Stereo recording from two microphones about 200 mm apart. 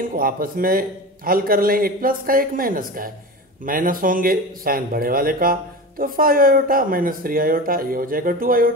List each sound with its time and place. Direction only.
0.0 s speech: 45° right (ahead or behind)